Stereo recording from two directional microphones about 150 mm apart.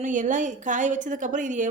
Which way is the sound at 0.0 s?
55° right (ahead or behind).